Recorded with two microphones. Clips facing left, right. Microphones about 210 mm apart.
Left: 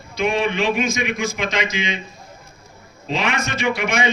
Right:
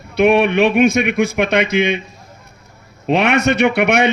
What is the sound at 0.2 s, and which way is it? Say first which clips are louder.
A man's voice: right 8 dB; 65° right (ahead or behind).